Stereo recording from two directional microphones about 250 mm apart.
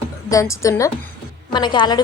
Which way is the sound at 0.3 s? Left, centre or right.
Centre.